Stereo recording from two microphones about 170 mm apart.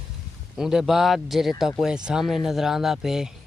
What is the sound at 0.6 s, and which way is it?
Speech, 5° right (ahead or behind).